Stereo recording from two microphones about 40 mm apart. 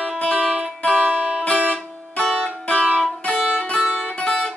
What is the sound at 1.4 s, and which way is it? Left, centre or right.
Music, left.